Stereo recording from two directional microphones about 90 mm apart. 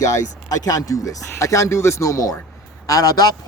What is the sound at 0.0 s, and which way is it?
A man's voice, 40° left (ahead or behind).